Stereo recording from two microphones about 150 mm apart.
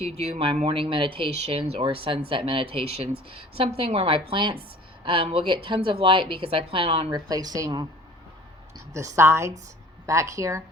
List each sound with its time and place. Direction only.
0.0 s a woman's voice: 45° right (ahead or behind); by 7.9 s 25° right (ahead or behind)
8.9 s a woman's voice: 20° right (ahead or behind)